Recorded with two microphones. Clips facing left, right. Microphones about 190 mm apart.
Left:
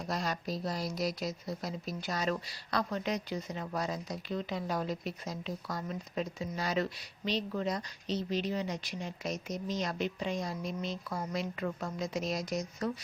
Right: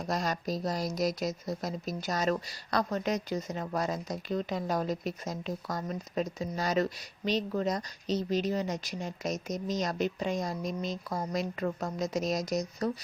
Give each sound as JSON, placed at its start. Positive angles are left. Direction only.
{"t": 0.1, "sound": "speech", "side_deg": -45}